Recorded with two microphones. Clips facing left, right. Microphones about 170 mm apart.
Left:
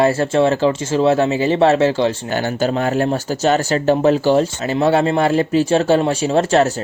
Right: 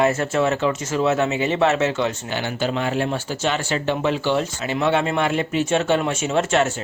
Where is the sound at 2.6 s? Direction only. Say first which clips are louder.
Left 5 dB; 40° left (ahead or behind).